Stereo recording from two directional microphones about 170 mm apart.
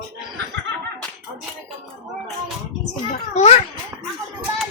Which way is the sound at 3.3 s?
40° left (ahead or behind).